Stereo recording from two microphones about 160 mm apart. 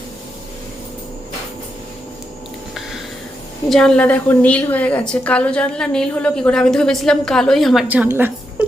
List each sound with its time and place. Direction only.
3.7 s a woman's voice: 5° left (ahead or behind)
7.9 s a woman's voice: 10° right (ahead or behind)